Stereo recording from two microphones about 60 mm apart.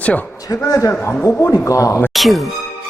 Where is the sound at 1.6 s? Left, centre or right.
Left.